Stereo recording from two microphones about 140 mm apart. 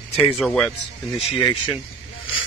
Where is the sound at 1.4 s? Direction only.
35° left (ahead or behind).